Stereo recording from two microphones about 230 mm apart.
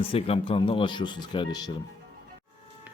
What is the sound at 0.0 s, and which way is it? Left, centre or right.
Speech, left.